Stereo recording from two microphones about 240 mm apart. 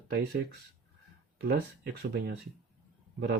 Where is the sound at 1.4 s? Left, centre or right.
Right.